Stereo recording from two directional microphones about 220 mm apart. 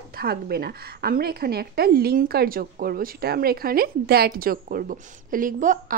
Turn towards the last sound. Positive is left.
turn(degrees=-35)  # may be behind; listen again after turning